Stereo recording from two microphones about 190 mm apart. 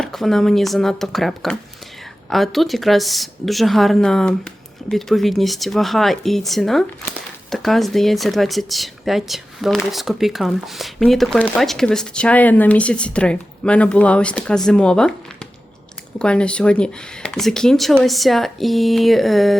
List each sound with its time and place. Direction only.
0.0 s speech: centre (ahead or behind)
16.1 s speech: 5° left (ahead or behind)